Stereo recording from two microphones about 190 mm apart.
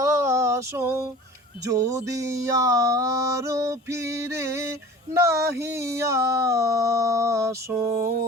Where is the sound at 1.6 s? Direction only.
15° right (ahead or behind).